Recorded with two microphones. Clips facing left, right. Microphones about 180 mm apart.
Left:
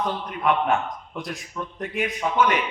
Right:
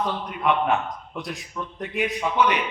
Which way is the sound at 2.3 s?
45° left (ahead or behind).